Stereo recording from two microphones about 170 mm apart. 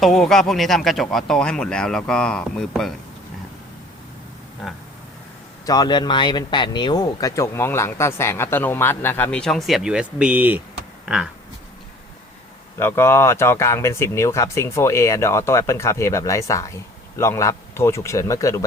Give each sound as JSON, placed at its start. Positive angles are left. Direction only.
{"t": 0.0, "sound": "speech", "side_deg": 0}
{"t": 4.6, "sound": "speech", "side_deg": 0}
{"t": 5.6, "sound": "speech", "side_deg": 25}
{"t": 11.0, "sound": "a sound", "side_deg": -5}
{"t": 12.8, "sound": "speech", "side_deg": 15}